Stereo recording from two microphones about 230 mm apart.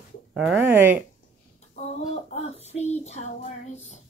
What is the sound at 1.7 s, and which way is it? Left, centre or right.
Child singing, left.